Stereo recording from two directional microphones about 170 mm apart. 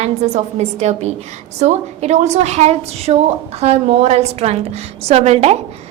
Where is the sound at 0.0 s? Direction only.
40° right (ahead or behind).